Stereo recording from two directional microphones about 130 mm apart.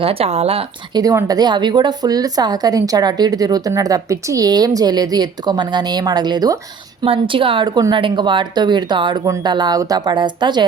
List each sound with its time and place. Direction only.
0.0 s speech: 45° right (ahead or behind)
0.9 s a woman's voice: 30° right (ahead or behind)